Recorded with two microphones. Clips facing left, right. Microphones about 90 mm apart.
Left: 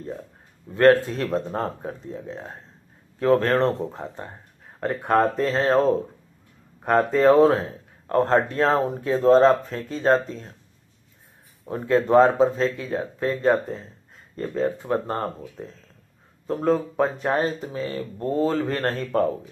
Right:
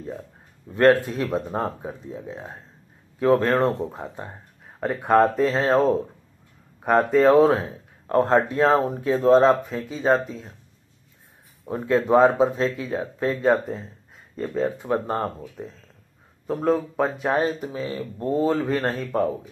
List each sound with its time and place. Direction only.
0.7 s speech: 20° right (ahead or behind)
1.2 s speech: 5° right (ahead or behind)
7.5 s speech: 20° right (ahead or behind)
8.2 s speech: 5° right (ahead or behind)
11.7 s speech: 5° right (ahead or behind)
13.4 s speech: 5° right (ahead or behind)
17.4 s speech: 15° right (ahead or behind)